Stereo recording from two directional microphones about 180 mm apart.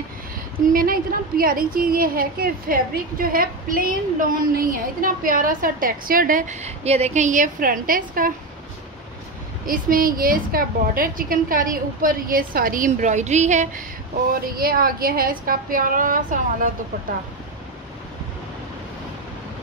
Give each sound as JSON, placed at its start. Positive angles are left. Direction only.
{"t": 0.7, "sound": "a woman's voice", "side_deg": -55}
{"t": 9.7, "sound": "a woman's voice", "side_deg": -50}
{"t": 14.3, "sound": "a woman's voice", "side_deg": -55}